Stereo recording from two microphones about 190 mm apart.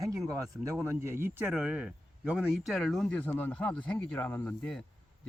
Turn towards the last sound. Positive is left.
turn(degrees=5)  # may be behind; listen again after turning